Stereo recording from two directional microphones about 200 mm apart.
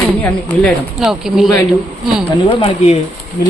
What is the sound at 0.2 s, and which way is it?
Speech, 5° left (ahead or behind).